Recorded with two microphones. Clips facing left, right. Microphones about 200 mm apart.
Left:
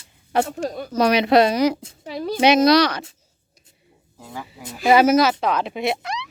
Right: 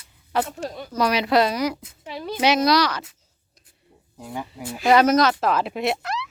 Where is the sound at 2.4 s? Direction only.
20° left (ahead or behind).